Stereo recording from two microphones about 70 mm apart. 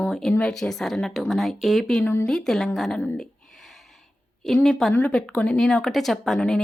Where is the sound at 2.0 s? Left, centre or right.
Left.